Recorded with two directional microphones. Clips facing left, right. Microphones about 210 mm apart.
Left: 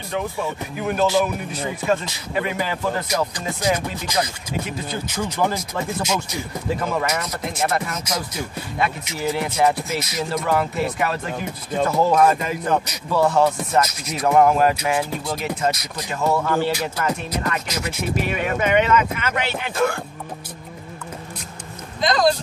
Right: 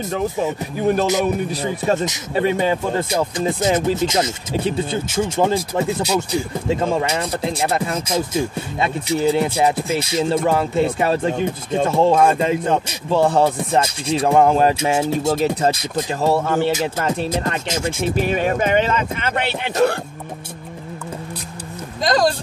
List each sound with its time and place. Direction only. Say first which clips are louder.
0.7 s speech: right 2 dB; 35° right (ahead or behind)
22.0 s speech: right 1 dB; 45° right (ahead or behind)